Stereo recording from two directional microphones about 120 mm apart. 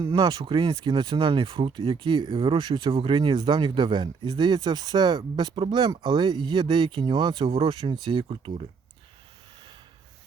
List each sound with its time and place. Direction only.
0.0 s speech: 35° right (ahead or behind)